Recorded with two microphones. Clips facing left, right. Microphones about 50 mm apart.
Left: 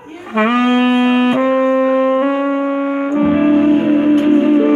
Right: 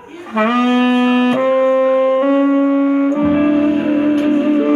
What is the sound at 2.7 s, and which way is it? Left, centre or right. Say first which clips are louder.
Brass instrument: right 3 dB; left.